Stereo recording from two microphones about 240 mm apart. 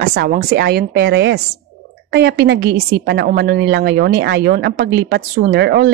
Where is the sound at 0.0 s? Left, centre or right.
Right.